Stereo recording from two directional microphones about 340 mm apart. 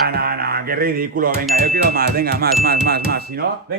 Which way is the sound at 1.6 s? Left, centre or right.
Right.